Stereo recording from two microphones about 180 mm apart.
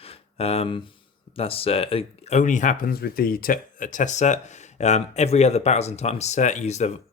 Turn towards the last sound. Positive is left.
turn(degrees=40)  # may be behind; listen again after turning